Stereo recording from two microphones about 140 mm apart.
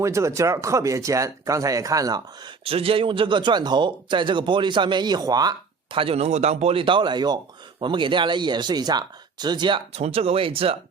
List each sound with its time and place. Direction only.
0.0 s speech: 20° right (ahead or behind)
2.6 s speech: 40° right (ahead or behind)